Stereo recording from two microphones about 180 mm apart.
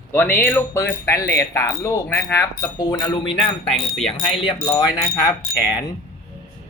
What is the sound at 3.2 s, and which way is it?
Speech, centre (ahead or behind).